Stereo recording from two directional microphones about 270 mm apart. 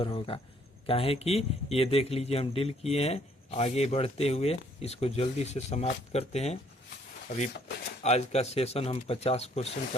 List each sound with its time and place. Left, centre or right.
0.0 s speech: centre
8.0 s speech: left